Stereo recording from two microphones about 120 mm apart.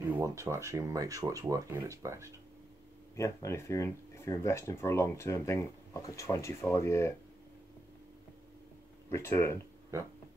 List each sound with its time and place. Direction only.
0.1 s speech: 25° right (ahead or behind)
3.2 s speech: 25° left (ahead or behind)
9.1 s speech: 20° left (ahead or behind)